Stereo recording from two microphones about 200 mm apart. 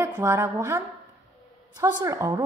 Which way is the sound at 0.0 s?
10° right (ahead or behind).